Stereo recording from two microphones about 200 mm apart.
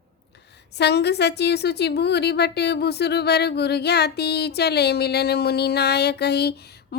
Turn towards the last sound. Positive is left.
turn(degrees=55)  # may be behind; listen again after turning